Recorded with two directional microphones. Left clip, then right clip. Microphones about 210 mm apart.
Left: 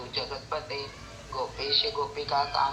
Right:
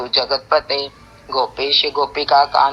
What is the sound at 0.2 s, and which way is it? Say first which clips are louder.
A man's voice: right 16 dB; 50° right (ahead or behind).